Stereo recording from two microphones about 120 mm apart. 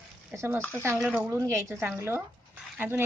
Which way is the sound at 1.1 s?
20° right (ahead or behind).